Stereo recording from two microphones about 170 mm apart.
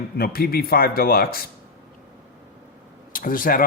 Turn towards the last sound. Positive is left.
turn(degrees=55)  # may be behind; listen again after turning